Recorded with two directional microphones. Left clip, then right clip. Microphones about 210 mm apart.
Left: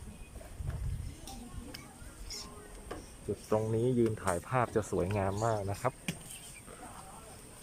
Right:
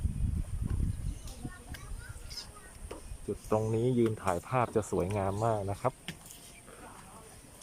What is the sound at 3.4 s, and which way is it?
Speech, centre (ahead or behind).